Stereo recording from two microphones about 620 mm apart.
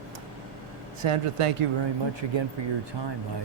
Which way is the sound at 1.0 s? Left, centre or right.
Right.